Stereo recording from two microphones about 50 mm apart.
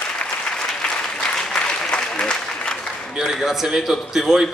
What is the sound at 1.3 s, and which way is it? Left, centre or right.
Applause, centre.